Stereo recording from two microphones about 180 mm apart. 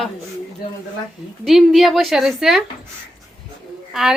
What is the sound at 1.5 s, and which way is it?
A woman's voice, centre (ahead or behind).